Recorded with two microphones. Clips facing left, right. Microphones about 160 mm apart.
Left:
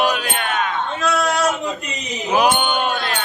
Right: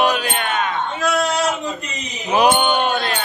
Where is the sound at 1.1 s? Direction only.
20° right (ahead or behind).